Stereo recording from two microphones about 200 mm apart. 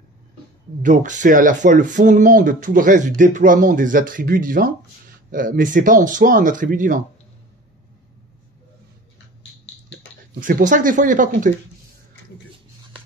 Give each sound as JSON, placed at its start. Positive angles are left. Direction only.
{"t": 0.8, "sound": "speech", "side_deg": -40}
{"t": 10.4, "sound": "speech", "side_deg": -40}